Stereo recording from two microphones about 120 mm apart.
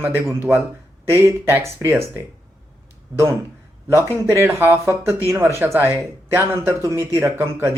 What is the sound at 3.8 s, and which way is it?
Speech, 20° right (ahead or behind).